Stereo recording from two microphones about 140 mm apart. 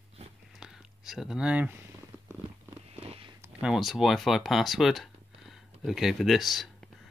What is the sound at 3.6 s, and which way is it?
Speech, 5° right (ahead or behind).